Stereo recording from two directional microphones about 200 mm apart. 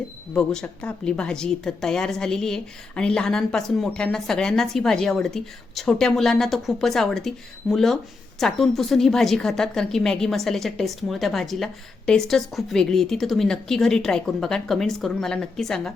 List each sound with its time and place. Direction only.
0.3 s a woman's voice: 5° left (ahead or behind)